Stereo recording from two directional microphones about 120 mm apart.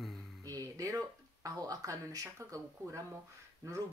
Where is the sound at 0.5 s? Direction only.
30° right (ahead or behind).